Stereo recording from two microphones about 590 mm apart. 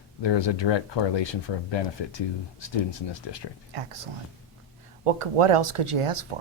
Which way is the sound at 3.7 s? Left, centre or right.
Right.